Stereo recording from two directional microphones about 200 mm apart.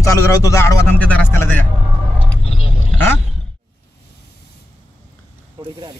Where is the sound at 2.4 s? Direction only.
30° left (ahead or behind).